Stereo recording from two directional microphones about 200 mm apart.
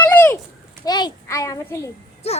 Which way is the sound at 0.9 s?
20° left (ahead or behind).